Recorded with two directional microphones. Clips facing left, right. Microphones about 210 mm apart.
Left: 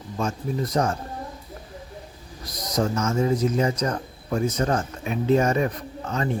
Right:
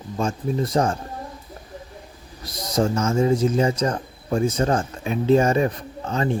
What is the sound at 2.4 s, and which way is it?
A man's voice, 30° right (ahead or behind).